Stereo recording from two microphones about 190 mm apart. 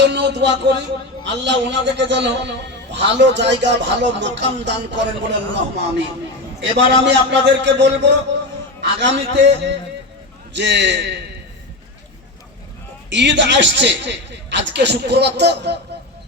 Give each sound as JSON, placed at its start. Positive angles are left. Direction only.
{"t": 0.0, "sound": "a sound", "side_deg": -65}
{"t": 1.2, "sound": "a man's voice", "side_deg": -70}
{"t": 13.1, "sound": "a man's voice", "side_deg": -70}